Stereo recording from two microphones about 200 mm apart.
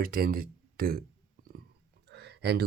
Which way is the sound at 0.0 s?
45° right (ahead or behind).